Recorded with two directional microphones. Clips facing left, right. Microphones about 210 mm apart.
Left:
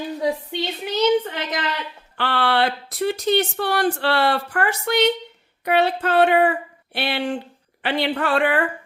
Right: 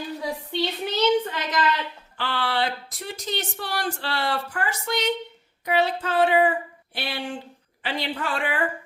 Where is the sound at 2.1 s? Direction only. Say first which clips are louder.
Left 6 dB; 65° left (ahead or behind).